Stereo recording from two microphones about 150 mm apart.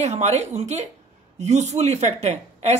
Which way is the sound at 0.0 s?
50° right (ahead or behind).